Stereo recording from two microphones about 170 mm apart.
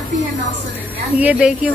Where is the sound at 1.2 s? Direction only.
5° right (ahead or behind).